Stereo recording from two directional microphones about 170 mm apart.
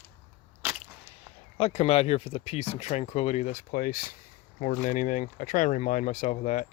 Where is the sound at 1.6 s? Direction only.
35° left (ahead or behind).